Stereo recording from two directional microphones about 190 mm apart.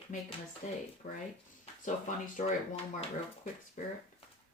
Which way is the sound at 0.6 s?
40° left (ahead or behind).